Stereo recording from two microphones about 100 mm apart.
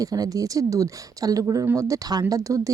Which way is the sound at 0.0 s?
35° right (ahead or behind).